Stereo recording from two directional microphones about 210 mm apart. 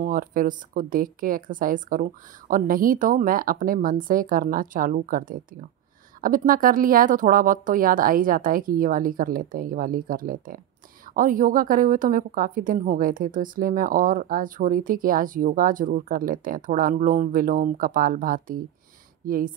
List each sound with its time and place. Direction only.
0.0 s a woman's voice: 40° right (ahead or behind)